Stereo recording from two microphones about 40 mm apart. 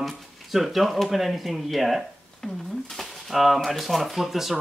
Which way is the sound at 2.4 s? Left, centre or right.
Centre.